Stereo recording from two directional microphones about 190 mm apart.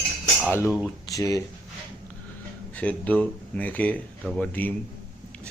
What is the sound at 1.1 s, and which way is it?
Speech, 15° left (ahead or behind).